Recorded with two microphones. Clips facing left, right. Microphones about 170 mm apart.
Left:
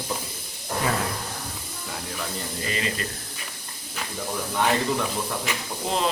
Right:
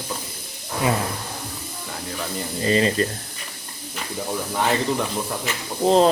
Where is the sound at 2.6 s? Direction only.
35° right (ahead or behind).